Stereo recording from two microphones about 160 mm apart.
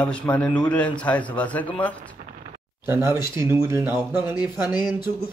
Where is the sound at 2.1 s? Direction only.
55° right (ahead or behind).